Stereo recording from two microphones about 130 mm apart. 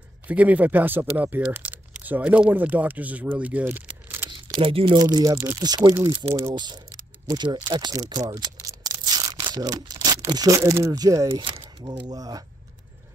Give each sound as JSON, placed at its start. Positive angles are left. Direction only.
{"t": 0.3, "sound": "speech", "side_deg": -10}
{"t": 4.5, "sound": "speech", "side_deg": -45}
{"t": 7.5, "sound": "speech", "side_deg": -35}
{"t": 8.1, "sound": "a sound", "side_deg": -30}
{"t": 11.8, "sound": "speech", "side_deg": -30}